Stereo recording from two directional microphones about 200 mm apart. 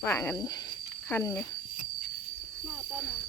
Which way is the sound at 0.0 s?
15° left (ahead or behind).